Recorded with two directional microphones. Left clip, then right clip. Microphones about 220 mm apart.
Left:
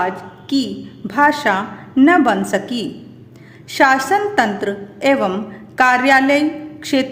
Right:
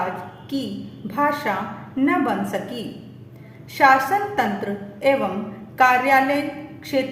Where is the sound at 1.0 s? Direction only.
50° left (ahead or behind).